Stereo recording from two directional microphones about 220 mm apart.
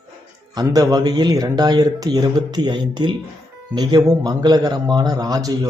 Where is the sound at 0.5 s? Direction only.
15° right (ahead or behind).